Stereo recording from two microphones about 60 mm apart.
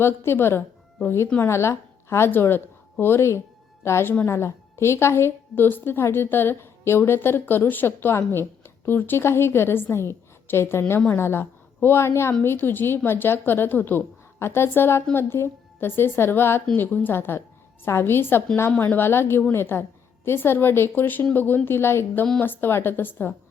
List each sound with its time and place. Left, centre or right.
0.0 s a woman's voice: left
2.3 s a woman's voice: left
14.3 s a woman's voice: left